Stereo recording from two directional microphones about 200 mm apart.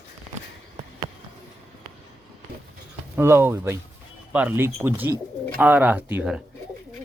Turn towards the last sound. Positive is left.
turn(degrees=-5)  # may be behind; listen again after turning